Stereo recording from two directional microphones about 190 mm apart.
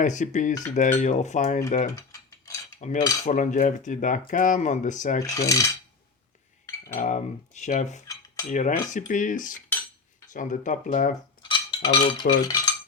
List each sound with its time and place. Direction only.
0.0 s speech: 40° left (ahead or behind)
2.7 s cutlery: 40° left (ahead or behind)
3.2 s speech: 40° left (ahead or behind)
5.2 s cutlery: 15° left (ahead or behind)
6.8 s speech: 45° left (ahead or behind)
11.4 s cutlery: 25° left (ahead or behind)
12.3 s cowbell: 20° left (ahead or behind)